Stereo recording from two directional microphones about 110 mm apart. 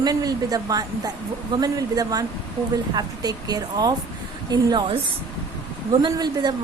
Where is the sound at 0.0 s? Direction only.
35° right (ahead or behind).